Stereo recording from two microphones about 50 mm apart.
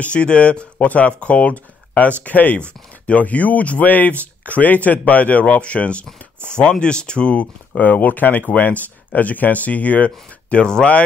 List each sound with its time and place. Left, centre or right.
0.0 s speech: left
7.8 s speech: left